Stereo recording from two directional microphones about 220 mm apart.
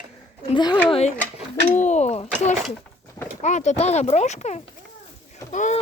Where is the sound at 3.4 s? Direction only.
30° left (ahead or behind).